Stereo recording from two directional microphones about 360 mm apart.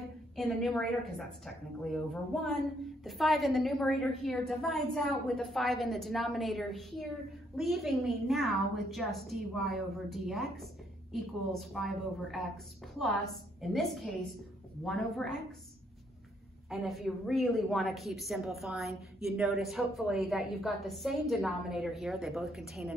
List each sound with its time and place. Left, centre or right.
0.4 s a woman's voice: centre
14.9 s a woman's voice: centre
16.6 s a woman's voice: centre